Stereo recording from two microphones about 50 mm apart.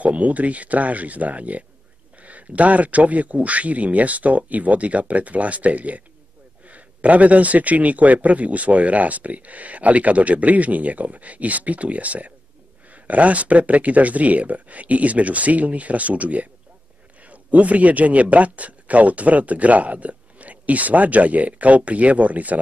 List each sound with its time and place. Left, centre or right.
0.0 s speech: right